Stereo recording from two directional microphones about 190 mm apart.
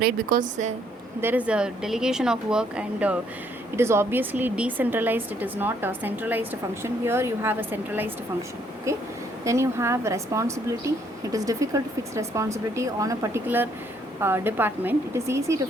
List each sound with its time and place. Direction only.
0.0 s a woman's voice: 50° right (ahead or behind)
1.2 s speech: 10° right (ahead or behind)